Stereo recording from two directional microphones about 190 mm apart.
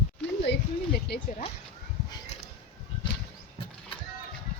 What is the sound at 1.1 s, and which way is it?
Speech, 60° left (ahead or behind).